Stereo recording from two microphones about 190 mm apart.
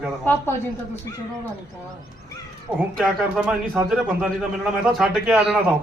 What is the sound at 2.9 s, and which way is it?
A man's voice, centre (ahead or behind).